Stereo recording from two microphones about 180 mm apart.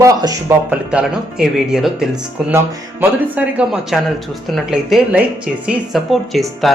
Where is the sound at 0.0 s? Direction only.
20° right (ahead or behind).